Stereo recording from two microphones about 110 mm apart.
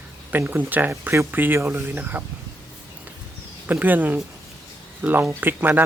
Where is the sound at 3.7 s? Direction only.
15° right (ahead or behind).